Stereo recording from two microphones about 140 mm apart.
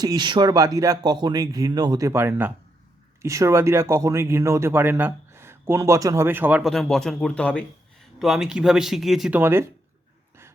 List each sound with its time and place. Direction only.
0.0 s speech: 30° right (ahead or behind); by 6.6 s 15° right (ahead or behind)
6.6 s speech: centre (ahead or behind)
8.2 s speech: 5° right (ahead or behind)
9.4 s speech: 15° right (ahead or behind)